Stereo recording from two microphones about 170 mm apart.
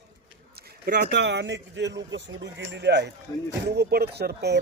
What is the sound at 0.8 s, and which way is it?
Speech, 65° right (ahead or behind).